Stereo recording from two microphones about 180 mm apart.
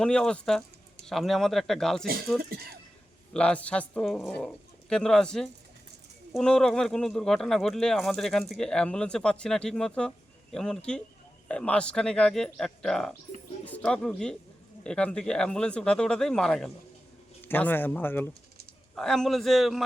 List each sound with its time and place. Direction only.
0.0 s speech: 5° left (ahead or behind)
2.4 s speech: 55° right (ahead or behind)
3.3 s speech: 5° left (ahead or behind)